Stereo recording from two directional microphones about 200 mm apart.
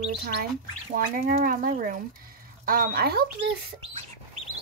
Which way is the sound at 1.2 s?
40° right (ahead or behind).